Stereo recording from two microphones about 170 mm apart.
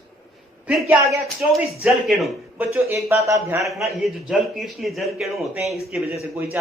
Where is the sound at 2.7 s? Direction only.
15° right (ahead or behind).